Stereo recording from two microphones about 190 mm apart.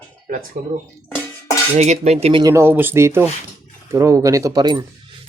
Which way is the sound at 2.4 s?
15° right (ahead or behind).